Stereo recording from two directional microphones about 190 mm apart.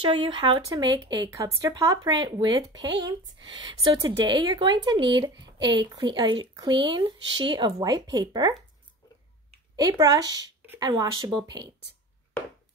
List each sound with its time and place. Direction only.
0.0 s speech: 25° right (ahead or behind)
9.8 s speech: 20° right (ahead or behind)